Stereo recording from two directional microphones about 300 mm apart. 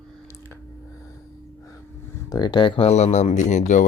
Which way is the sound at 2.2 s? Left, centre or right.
Centre.